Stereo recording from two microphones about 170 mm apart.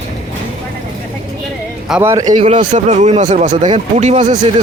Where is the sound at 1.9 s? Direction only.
10° right (ahead or behind).